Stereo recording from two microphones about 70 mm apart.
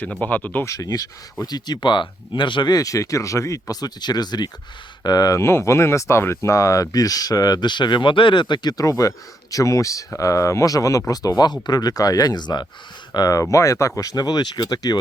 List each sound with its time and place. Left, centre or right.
0.2 s speech: left
0.6 s speech: left
1.5 s speech: left
5.0 s speech: left
5.4 s speech: left
6.5 s speech: left
8.8 s speech: left
13.1 s speech: left